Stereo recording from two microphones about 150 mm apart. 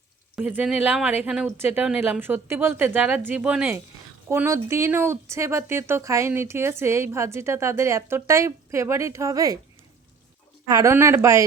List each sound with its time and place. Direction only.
0.3 s speech: 10° right (ahead or behind)
10.7 s speech: 25° right (ahead or behind)